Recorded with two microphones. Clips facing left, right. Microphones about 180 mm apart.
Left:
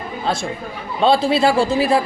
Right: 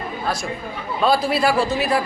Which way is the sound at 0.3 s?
25° left (ahead or behind).